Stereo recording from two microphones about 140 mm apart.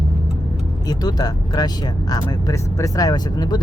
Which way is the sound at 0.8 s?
30° left (ahead or behind).